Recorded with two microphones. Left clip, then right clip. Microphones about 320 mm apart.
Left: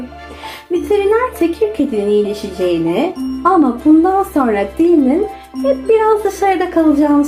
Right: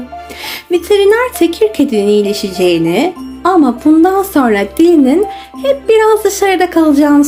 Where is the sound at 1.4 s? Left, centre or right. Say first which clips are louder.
Right 4 dB; right.